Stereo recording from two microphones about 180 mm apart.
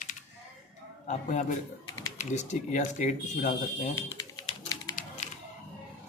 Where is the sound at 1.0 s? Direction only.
40° left (ahead or behind).